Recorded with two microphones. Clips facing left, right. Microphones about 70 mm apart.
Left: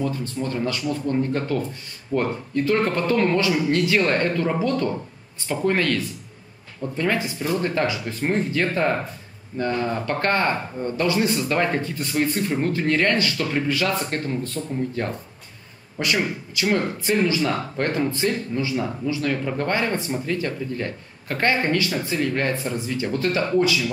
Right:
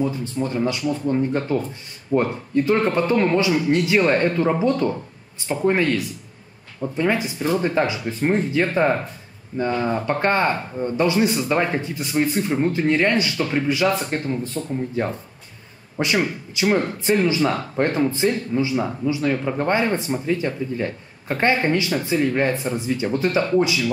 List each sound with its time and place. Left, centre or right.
0.0 s speech: centre
16.0 s speech: right